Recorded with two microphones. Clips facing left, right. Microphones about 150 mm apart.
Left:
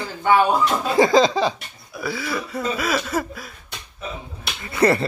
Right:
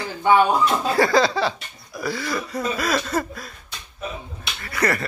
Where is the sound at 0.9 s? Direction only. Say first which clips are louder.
Left 5 dB; 20° left (ahead or behind).